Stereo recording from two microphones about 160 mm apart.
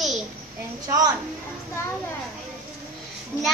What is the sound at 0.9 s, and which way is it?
Speech, 25° right (ahead or behind).